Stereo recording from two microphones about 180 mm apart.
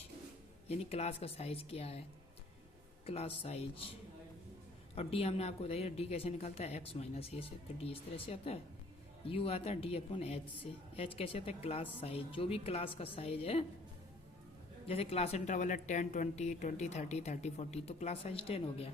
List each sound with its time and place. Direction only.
0.7 s a woman's voice: 35° left (ahead or behind)
3.1 s a woman's voice: 35° left (ahead or behind)
4.9 s a woman's voice: 35° left (ahead or behind)
14.8 s a woman's voice: 35° left (ahead or behind)